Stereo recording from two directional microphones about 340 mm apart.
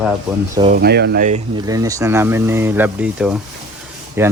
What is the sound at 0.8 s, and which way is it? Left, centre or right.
Speech, right.